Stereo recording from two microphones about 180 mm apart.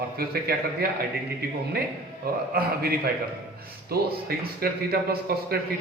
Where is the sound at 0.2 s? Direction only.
55° right (ahead or behind).